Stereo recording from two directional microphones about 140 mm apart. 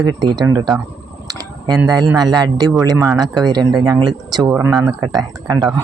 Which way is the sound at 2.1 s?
30° right (ahead or behind).